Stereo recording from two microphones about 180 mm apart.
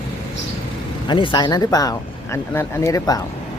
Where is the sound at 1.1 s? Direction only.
25° left (ahead or behind).